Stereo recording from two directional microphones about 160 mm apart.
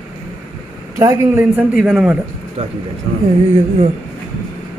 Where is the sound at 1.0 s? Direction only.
15° right (ahead or behind).